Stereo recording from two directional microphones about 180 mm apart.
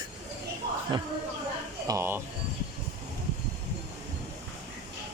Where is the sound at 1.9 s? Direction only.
15° right (ahead or behind).